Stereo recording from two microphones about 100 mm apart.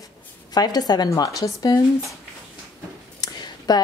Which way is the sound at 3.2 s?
45° left (ahead or behind).